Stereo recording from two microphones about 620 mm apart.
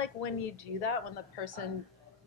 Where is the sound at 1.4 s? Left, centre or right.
Left.